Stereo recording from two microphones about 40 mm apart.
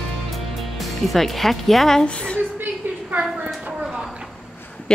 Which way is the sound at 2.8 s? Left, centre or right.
Right.